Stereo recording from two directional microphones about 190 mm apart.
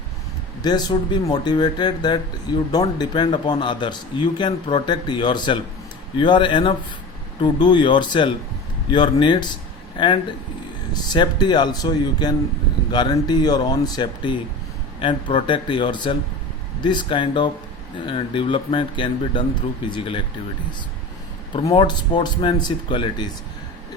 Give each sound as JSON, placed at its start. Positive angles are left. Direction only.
{"t": 0.6, "sound": "speech", "side_deg": 20}
{"t": 21.7, "sound": "speech", "side_deg": 25}